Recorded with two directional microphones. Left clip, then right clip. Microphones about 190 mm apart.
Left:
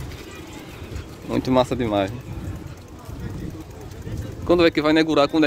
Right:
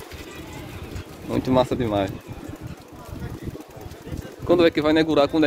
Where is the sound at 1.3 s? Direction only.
15° left (ahead or behind).